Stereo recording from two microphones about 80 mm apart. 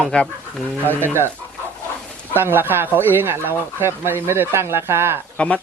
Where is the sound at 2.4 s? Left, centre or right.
Right.